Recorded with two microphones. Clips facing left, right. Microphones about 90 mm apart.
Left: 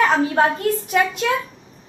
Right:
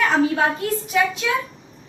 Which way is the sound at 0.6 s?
50° left (ahead or behind).